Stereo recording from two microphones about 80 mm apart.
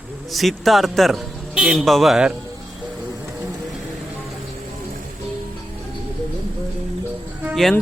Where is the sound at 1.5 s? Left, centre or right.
Centre.